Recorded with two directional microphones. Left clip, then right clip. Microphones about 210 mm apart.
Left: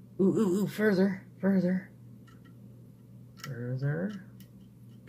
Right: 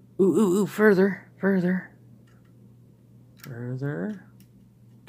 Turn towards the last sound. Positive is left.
turn(degrees=-45)  # may be behind; listen again after turning